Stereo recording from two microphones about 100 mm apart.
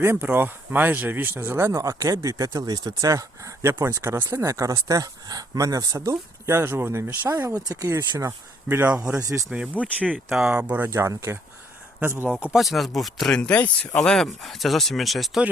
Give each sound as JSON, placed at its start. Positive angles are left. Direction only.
{"t": 0.0, "sound": "speech", "side_deg": -25}
{"t": 7.3, "sound": "speech", "side_deg": -35}
{"t": 8.7, "sound": "speech", "side_deg": -20}
{"t": 9.1, "sound": "speech", "side_deg": -30}
{"t": 9.8, "sound": "speech", "side_deg": -15}
{"t": 12.5, "sound": "speech", "side_deg": 0}